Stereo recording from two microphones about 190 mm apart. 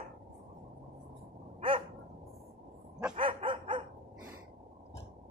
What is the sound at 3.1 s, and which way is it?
Dog, 25° right (ahead or behind).